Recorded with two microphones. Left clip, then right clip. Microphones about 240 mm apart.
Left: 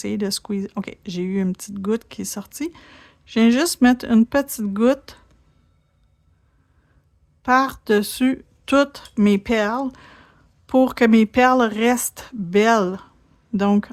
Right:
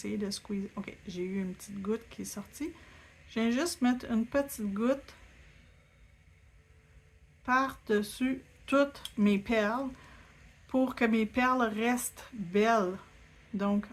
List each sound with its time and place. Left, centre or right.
0.0 s speech: left
7.4 s speech: left